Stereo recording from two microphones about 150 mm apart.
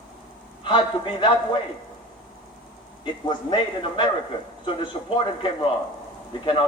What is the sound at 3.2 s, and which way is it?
Speech, 30° left (ahead or behind).